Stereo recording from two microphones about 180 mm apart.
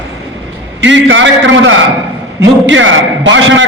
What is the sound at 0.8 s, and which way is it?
A man's voice, 90° right.